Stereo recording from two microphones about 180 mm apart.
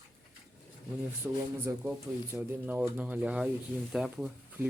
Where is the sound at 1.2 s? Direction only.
5° right (ahead or behind).